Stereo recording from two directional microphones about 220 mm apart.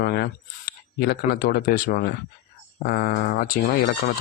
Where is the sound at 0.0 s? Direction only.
45° left (ahead or behind).